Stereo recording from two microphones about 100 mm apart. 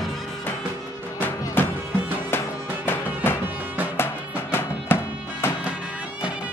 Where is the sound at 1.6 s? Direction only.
20° left (ahead or behind).